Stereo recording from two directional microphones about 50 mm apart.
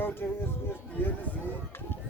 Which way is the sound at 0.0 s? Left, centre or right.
Left.